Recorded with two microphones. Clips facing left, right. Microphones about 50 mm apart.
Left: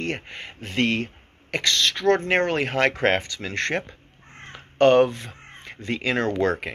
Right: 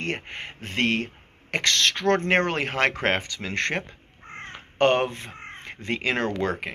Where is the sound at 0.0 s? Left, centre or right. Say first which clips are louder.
Left 1 dB; right.